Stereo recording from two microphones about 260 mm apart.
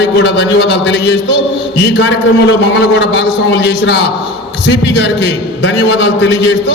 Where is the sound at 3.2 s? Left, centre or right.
Left.